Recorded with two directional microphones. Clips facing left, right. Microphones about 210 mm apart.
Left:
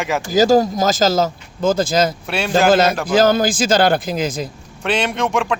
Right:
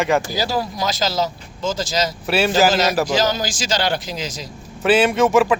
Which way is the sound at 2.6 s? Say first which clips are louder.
Left 3 dB; 55° left (ahead or behind).